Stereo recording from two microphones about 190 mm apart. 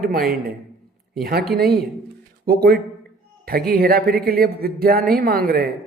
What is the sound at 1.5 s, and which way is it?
A man's voice, 60° right (ahead or behind).